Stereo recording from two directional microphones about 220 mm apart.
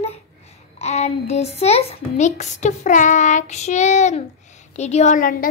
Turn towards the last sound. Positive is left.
turn(degrees=40)  # may be behind; listen again after turning